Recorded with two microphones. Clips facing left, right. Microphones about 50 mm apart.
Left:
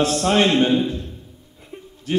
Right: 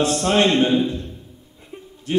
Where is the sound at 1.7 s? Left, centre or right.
Centre.